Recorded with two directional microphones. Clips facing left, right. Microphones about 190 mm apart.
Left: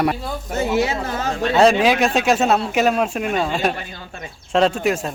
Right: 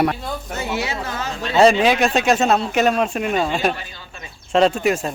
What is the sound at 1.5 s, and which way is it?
Speech, centre (ahead or behind).